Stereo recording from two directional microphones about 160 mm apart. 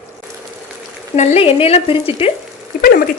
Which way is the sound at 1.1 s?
45° left (ahead or behind).